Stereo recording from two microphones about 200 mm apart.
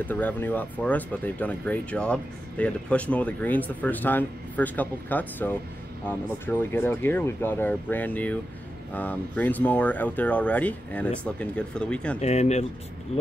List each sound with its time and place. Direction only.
0.0 s speech: 10° left (ahead or behind)
12.2 s speech: 35° left (ahead or behind)